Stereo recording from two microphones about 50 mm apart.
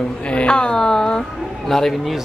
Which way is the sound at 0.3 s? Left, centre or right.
Left.